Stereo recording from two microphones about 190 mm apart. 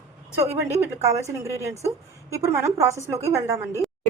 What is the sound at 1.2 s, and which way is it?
A woman's voice, 15° right (ahead or behind).